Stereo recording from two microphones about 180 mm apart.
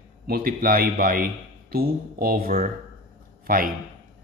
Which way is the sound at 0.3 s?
55° right (ahead or behind).